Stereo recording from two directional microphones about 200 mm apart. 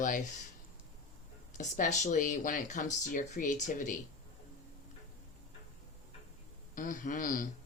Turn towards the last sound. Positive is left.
turn(degrees=45)  # may be behind; listen again after turning